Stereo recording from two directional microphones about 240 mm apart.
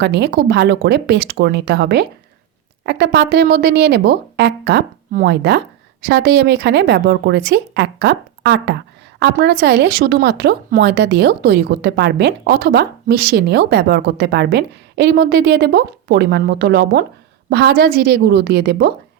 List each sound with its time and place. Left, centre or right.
0.0 s speech: right